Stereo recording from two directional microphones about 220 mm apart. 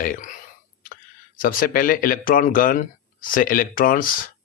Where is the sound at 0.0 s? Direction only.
40° left (ahead or behind).